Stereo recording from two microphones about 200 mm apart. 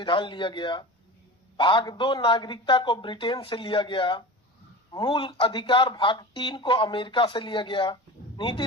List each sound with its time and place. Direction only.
0.0 s a man's voice: 25° left (ahead or behind)